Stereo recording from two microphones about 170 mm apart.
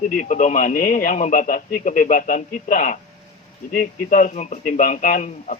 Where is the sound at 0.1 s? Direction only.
50° left (ahead or behind).